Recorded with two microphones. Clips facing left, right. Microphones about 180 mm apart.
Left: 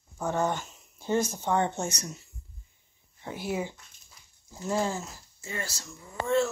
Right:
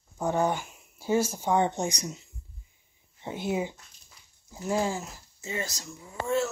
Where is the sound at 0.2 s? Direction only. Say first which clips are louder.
Right 2 dB; 15° right (ahead or behind).